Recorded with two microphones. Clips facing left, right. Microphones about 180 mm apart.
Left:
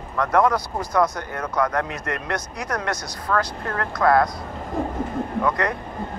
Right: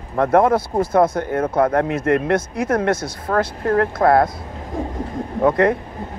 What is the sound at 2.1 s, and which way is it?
Speech, 55° right (ahead or behind).